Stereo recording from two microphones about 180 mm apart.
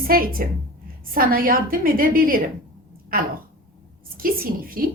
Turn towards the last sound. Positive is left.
turn(degrees=-55)  # may be behind; listen again after turning